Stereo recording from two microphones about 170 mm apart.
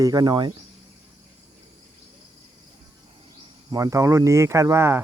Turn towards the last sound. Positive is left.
turn(degrees=-15)  # may be behind; listen again after turning